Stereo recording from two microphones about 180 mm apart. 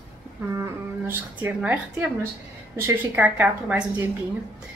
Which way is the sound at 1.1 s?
10° right (ahead or behind).